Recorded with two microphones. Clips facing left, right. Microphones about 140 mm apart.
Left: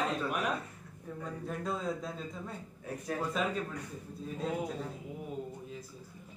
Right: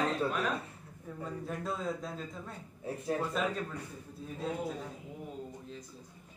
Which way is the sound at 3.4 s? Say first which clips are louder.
Left 2 dB; centre (ahead or behind).